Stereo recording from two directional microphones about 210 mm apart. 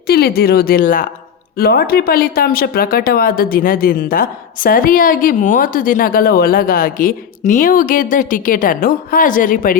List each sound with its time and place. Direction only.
0.1 s speech: 45° left (ahead or behind)